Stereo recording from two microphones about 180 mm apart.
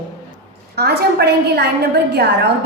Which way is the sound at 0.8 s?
65° right (ahead or behind).